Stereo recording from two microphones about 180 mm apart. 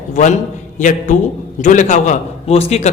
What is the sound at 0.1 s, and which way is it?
A man's voice, 45° left (ahead or behind).